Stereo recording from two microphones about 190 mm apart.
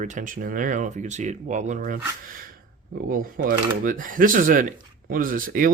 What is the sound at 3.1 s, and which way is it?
Speech, 45° right (ahead or behind).